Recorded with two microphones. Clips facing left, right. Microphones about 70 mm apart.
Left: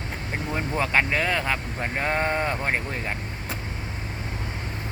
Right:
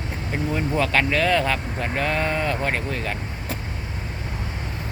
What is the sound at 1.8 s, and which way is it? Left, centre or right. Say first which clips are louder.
Speech: even; left.